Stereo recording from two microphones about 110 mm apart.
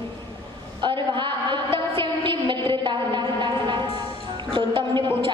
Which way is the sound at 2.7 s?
45° right (ahead or behind).